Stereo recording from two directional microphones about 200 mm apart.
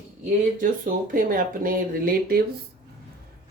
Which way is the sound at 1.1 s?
45° right (ahead or behind).